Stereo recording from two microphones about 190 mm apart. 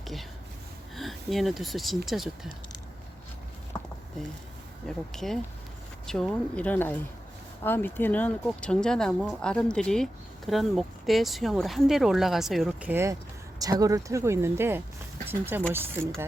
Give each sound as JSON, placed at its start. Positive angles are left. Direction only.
{"t": 0.0, "sound": "speech", "side_deg": 0}
{"t": 5.1, "sound": "speech", "side_deg": 0}